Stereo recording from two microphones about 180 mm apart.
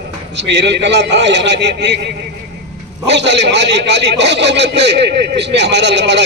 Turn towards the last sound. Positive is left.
turn(degrees=-75)  # may be behind; listen again after turning